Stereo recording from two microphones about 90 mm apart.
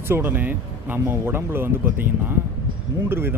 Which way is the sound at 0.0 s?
25° right (ahead or behind).